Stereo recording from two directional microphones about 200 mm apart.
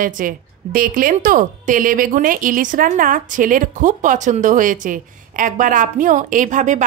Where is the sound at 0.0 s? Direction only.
45° right (ahead or behind).